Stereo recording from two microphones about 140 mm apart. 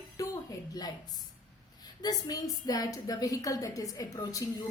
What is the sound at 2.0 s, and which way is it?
A woman's voice, 25° left (ahead or behind).